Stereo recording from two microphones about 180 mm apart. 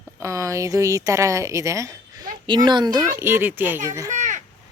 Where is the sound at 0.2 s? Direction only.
15° right (ahead or behind).